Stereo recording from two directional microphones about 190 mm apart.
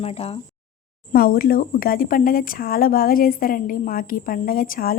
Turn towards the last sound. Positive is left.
turn(degrees=50)  # may be behind; listen again after turning